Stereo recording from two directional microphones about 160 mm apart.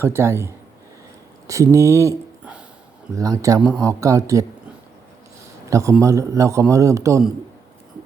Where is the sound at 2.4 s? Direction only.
5° right (ahead or behind).